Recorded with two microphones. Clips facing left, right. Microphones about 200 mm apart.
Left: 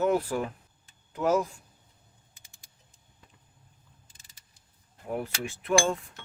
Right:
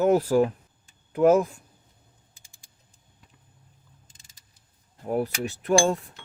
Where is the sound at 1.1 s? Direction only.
55° right (ahead or behind).